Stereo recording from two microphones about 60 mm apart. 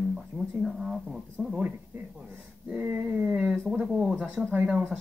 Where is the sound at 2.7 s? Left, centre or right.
Right.